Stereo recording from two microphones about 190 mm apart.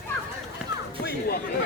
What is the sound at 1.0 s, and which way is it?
Chatter, 55° left (ahead or behind).